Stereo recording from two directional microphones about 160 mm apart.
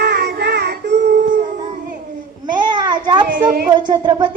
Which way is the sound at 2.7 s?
30° right (ahead or behind).